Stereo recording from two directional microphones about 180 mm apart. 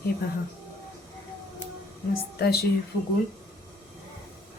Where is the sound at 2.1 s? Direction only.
60° left (ahead or behind).